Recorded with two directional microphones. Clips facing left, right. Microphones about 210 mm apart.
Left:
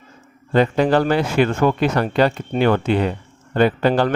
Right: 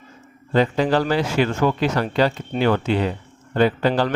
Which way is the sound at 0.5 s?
55° left (ahead or behind).